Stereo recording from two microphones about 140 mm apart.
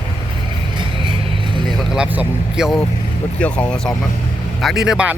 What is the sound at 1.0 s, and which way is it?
Vehicle, 35° right (ahead or behind).